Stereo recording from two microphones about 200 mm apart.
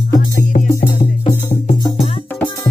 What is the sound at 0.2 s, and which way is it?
Music, 45° left (ahead or behind).